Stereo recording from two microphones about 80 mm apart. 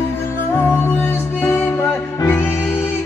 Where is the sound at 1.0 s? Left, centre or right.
Left.